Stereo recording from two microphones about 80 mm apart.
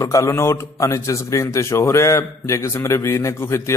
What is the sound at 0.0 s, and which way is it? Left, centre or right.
Speech, left.